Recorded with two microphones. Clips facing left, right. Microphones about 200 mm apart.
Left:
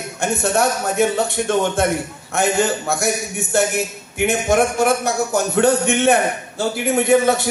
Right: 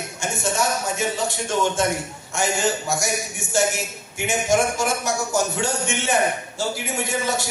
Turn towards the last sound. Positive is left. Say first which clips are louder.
# left 10 dB
turn(degrees=60)  # may be behind; listen again after turning